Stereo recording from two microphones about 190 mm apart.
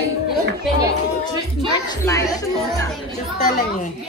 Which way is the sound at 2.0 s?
20° left (ahead or behind).